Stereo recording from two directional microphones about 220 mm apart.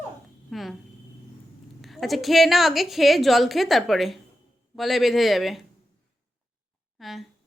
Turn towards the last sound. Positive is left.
turn(degrees=0)  # may be behind; listen again after turning